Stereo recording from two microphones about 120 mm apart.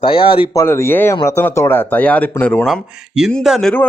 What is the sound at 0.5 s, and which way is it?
Speech, 20° left (ahead or behind).